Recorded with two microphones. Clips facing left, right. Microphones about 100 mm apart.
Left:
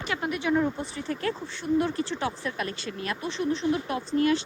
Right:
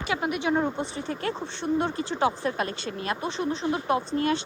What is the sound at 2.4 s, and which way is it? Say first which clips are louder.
Speech: right 4 dB; 35° right (ahead or behind).